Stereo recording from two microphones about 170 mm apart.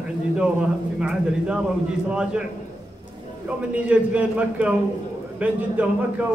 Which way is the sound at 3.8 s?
10° right (ahead or behind).